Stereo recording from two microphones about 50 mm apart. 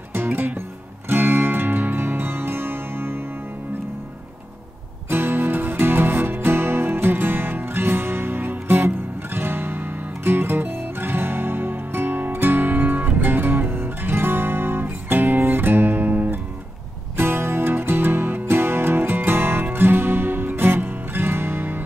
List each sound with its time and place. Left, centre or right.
0.1 s music: right
5.1 s music: right
17.2 s music: right